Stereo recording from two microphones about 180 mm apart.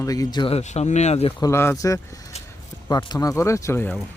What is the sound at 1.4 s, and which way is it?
Speech, 15° left (ahead or behind).